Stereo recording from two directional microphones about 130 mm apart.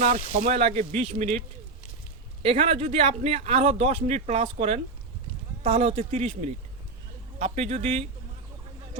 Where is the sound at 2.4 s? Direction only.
50° right (ahead or behind).